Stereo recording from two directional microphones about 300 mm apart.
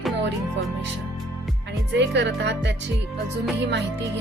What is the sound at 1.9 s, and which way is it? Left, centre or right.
Speech, right.